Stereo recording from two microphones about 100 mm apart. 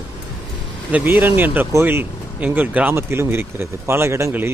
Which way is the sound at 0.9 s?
15° right (ahead or behind).